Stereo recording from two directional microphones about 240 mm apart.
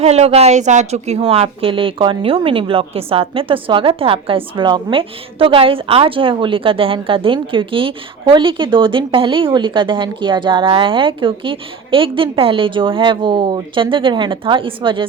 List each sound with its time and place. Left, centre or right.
0.0 s a woman's voice: right